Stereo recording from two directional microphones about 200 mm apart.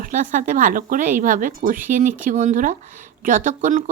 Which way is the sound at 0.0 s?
40° right (ahead or behind).